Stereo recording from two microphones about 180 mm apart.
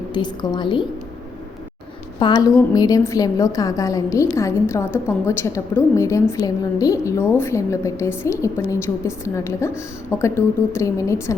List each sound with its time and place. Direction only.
0.1 s a woman's voice: 25° left (ahead or behind)
2.1 s a woman's voice: 25° left (ahead or behind)